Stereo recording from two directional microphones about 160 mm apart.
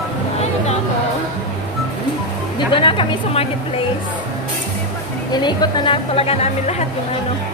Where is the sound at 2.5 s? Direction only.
30° left (ahead or behind).